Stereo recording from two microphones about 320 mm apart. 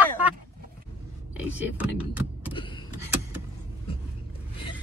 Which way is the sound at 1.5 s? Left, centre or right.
Centre.